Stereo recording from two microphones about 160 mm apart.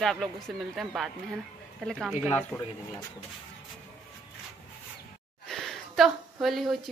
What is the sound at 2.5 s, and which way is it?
Speech, 15° left (ahead or behind).